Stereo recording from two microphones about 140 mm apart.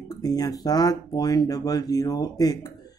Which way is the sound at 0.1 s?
25° left (ahead or behind).